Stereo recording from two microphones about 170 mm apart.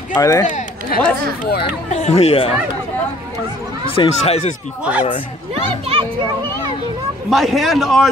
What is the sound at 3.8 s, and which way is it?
Speech, 35° left (ahead or behind).